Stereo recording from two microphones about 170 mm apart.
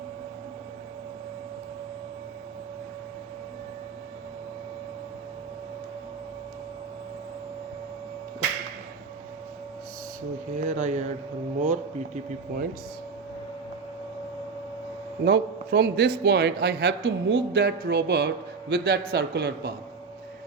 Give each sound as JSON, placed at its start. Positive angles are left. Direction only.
{"t": 10.6, "sound": "a man's voice", "side_deg": -45}
{"t": 15.2, "sound": "a man's voice", "side_deg": -75}